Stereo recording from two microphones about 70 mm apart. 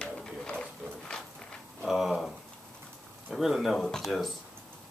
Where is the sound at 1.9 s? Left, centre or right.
Centre.